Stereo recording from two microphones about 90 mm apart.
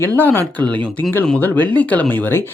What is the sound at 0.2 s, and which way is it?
Speech, 20° left (ahead or behind).